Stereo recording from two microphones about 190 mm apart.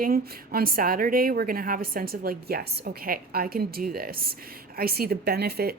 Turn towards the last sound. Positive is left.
turn(degrees=-55)  # may be behind; listen again after turning